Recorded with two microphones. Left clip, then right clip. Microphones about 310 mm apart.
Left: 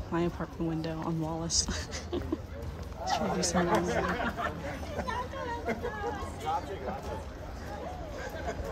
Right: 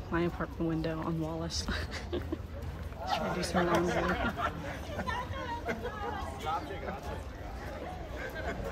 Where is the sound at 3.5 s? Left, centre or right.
Left.